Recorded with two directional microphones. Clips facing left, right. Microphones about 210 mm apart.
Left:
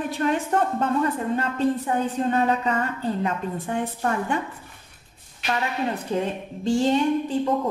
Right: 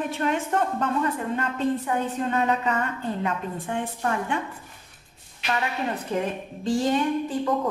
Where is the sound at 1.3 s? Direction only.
35° left (ahead or behind).